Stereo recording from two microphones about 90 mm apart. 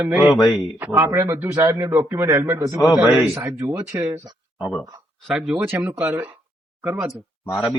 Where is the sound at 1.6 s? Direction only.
40° right (ahead or behind).